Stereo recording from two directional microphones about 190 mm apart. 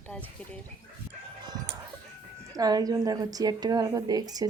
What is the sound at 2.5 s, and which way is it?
Speech, 20° right (ahead or behind).